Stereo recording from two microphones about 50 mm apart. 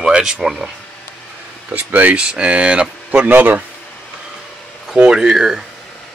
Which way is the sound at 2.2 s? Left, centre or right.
Right.